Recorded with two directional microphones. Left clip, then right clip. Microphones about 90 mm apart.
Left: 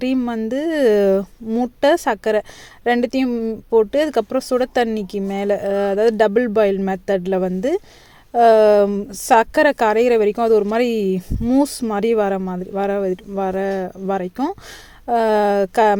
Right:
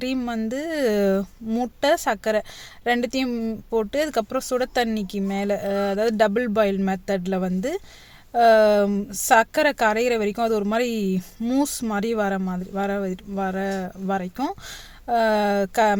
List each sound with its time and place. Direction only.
0.2 s speech: 30° left (ahead or behind)
1.5 s speech: 20° left (ahead or behind)
1.8 s speech: 35° left (ahead or behind)